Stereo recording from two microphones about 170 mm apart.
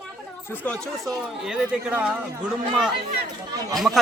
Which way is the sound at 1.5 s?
5° right (ahead or behind).